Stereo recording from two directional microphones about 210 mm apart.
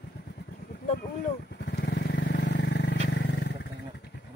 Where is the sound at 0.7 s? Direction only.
45° left (ahead or behind).